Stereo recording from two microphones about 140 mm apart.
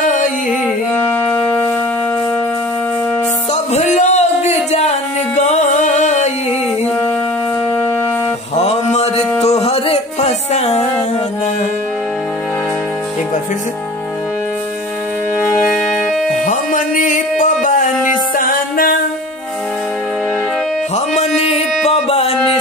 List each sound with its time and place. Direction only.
0.9 s music: 10° left (ahead or behind)
3.7 s music: 55° left (ahead or behind)
8.5 s mantra: 50° left (ahead or behind)
9.4 s music: 50° left (ahead or behind)
16.3 s music: 70° left (ahead or behind)
18.3 s music: 80° left
20.9 s music: 50° left (ahead or behind)